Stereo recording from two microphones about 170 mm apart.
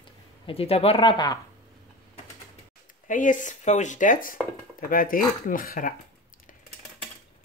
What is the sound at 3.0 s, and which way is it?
Speech, 50° left (ahead or behind).